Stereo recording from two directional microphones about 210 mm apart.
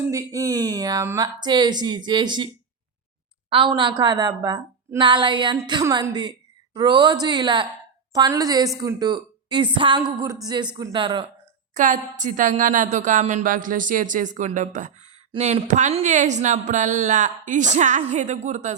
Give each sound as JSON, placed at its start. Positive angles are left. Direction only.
{"t": 0.1, "sound": "a woman's voice", "side_deg": -15}
{"t": 3.5, "sound": "a woman's voice", "side_deg": -25}
{"t": 11.7, "sound": "a woman's voice", "side_deg": -35}